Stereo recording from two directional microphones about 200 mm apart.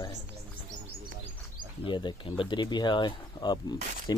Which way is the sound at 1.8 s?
25° left (ahead or behind).